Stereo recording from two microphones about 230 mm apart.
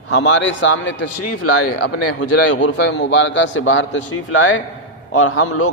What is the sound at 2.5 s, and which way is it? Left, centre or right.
A man's voice, left.